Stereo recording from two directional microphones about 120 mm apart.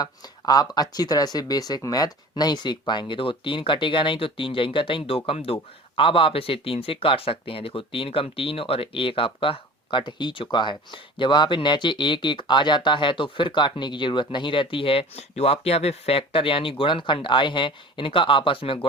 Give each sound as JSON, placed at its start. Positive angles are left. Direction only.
{"t": 0.0, "sound": "speech", "side_deg": 35}